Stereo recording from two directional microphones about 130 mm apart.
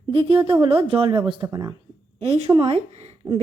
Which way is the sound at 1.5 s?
25° right (ahead or behind).